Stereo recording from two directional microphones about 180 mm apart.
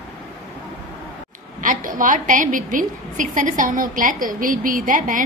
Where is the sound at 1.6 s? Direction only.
45° right (ahead or behind).